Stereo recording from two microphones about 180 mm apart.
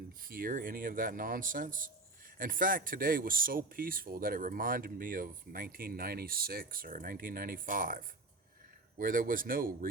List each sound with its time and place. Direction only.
0.2 s speech: 55° right (ahead or behind)